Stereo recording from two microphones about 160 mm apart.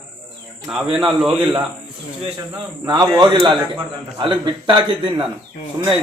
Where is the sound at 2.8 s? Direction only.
25° right (ahead or behind).